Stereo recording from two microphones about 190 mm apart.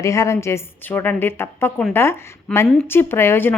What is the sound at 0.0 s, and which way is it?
A woman's voice, 15° left (ahead or behind).